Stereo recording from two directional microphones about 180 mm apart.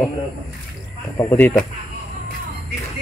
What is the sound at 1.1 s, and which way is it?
Speech, 10° left (ahead or behind).